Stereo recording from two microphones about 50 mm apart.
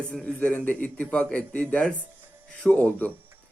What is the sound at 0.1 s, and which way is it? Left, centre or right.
A man's voice, left.